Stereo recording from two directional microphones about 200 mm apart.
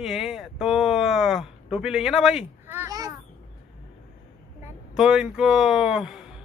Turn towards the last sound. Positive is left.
turn(degrees=0)  # may be behind; listen again after turning